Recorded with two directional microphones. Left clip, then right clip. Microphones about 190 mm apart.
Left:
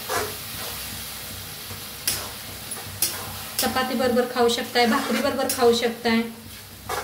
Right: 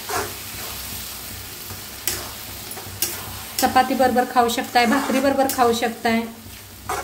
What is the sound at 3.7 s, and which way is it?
Speech, 55° right (ahead or behind).